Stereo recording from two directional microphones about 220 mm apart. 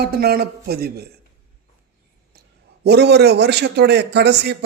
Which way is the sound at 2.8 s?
50° right (ahead or behind).